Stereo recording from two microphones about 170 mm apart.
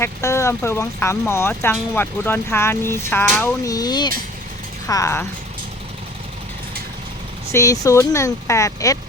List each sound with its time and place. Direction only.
0.0 s speech: 15° left (ahead or behind)
7.5 s speech: 20° left (ahead or behind)